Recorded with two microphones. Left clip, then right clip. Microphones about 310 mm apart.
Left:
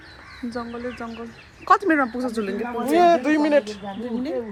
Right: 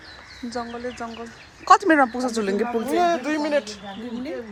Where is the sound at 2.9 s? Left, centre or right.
Left.